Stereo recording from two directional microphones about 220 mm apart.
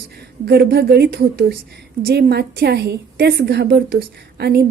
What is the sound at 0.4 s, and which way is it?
A woman's voice, 45° right (ahead or behind).